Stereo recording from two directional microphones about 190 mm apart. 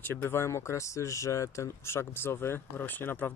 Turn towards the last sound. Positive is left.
turn(degrees=10)  # may be behind; listen again after turning